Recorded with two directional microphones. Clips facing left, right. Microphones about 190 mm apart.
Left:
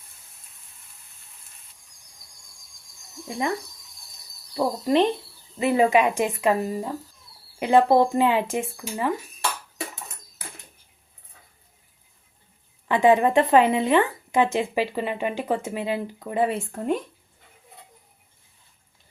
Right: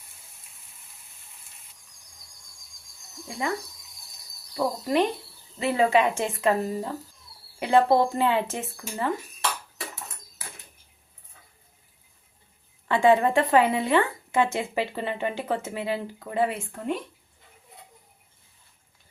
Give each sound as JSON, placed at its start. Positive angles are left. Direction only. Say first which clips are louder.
{"t": 3.2, "sound": "speech", "louder": "left 3 dB", "side_deg": 20}
{"t": 4.5, "sound": "a woman's voice", "louder": "left 3 dB", "side_deg": 25}
{"t": 12.9, "sound": "a woman's voice", "louder": "left 2 dB", "side_deg": 20}